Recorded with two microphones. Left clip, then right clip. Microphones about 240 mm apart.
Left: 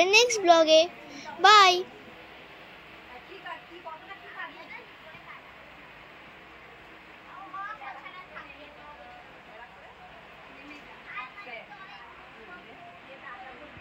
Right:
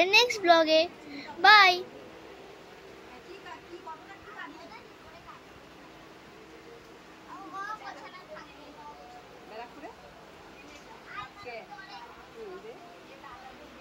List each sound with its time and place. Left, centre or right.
0.0 s a child's voice: centre